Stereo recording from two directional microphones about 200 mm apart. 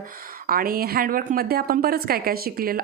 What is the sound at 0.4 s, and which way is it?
A woman's voice, 45° right (ahead or behind).